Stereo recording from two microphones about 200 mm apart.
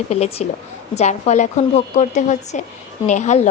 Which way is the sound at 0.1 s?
30° left (ahead or behind).